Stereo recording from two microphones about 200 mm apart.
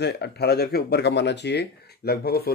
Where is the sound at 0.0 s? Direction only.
55° left (ahead or behind).